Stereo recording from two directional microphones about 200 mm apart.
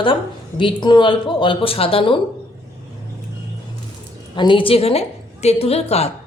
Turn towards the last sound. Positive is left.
turn(degrees=30)  # may be behind; listen again after turning